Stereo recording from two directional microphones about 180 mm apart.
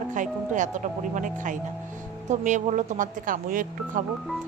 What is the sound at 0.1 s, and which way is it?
A woman's voice, 45° right (ahead or behind).